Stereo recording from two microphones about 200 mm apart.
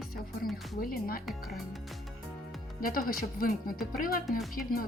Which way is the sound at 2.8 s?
45° left (ahead or behind).